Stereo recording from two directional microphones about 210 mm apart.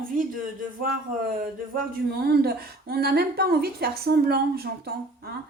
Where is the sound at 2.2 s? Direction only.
50° right (ahead or behind).